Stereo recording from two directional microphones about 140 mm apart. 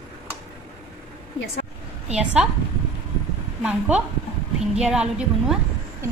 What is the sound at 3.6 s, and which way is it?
A woman's voice, 10° right (ahead or behind).